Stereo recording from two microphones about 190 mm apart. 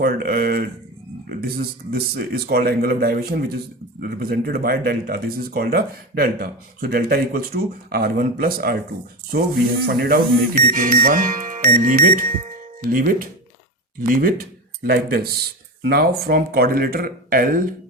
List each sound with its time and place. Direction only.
0.0 s a man's voice: 50° right (ahead or behind)
9.8 s speech: 55° right (ahead or behind)